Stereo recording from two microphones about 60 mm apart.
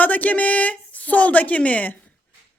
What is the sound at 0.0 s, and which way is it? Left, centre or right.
A woman's voice, left.